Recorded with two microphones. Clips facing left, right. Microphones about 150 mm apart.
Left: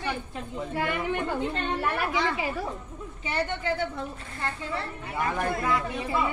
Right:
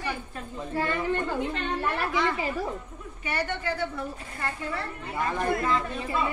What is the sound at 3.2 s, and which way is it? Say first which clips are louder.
Speech: left 1 dB; 25° left (ahead or behind).